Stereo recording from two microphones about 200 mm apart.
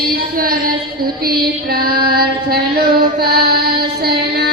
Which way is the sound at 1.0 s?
50° right (ahead or behind).